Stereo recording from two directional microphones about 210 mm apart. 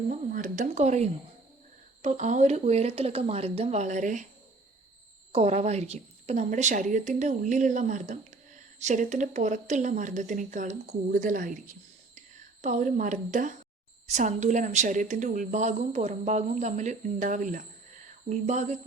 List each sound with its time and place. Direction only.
0.1 s a woman's voice: 35° right (ahead or behind)
5.3 s a woman's voice: 30° right (ahead or behind)